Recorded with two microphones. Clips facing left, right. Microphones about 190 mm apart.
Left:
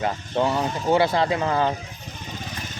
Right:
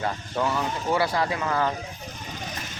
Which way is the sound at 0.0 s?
25° left (ahead or behind).